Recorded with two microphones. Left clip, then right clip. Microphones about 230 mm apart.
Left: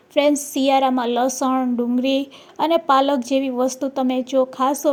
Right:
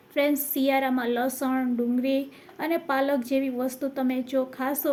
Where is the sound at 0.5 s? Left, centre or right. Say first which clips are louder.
Left 7 dB; left.